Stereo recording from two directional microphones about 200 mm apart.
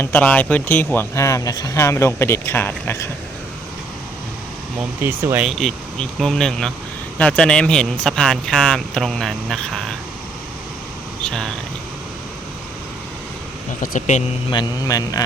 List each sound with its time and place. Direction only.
0.0 s speech: 10° left (ahead or behind)
5.0 s speech: 10° right (ahead or behind)
11.2 s speech: 5° left (ahead or behind)
13.8 s speech: 40° left (ahead or behind)
14.5 s speech: 20° left (ahead or behind)